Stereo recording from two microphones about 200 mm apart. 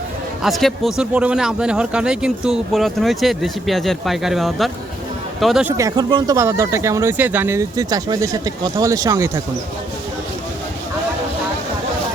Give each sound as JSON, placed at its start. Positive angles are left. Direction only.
{"t": 0.4, "sound": "speech", "side_deg": 0}
{"t": 5.7, "sound": "speech", "side_deg": -20}